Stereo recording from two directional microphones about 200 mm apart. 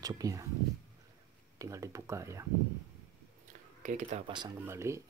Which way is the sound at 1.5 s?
15° right (ahead or behind).